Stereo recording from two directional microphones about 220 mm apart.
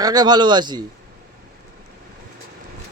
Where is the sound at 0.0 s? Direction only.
20° right (ahead or behind).